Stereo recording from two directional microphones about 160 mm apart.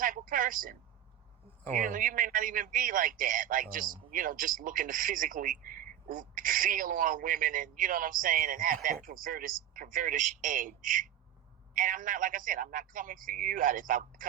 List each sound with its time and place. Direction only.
0.0 s a man's voice: 55° right (ahead or behind)